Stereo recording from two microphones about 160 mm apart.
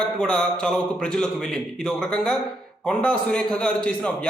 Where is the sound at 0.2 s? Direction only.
5° left (ahead or behind).